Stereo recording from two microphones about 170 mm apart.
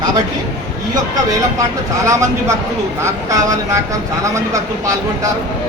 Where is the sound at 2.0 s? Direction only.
15° right (ahead or behind).